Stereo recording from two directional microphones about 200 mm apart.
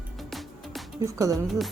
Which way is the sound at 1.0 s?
15° right (ahead or behind).